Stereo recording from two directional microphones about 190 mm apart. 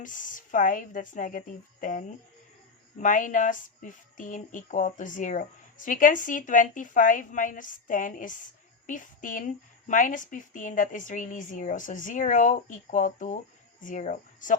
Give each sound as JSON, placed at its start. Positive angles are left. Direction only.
{"t": 0.0, "sound": "a woman's voice", "side_deg": 45}